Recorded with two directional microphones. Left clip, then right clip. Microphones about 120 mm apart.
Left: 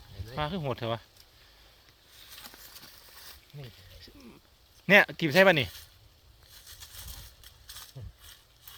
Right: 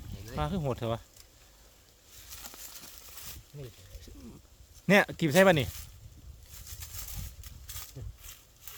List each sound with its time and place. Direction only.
0.3 s speech: 35° right (ahead or behind)
3.6 s wild animals: 50° right (ahead or behind)
4.9 s speech: 55° right (ahead or behind)